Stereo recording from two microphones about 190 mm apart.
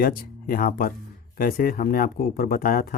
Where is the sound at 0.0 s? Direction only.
50° left (ahead or behind).